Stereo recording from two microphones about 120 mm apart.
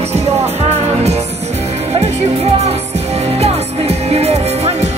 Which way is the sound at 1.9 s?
60° right (ahead or behind).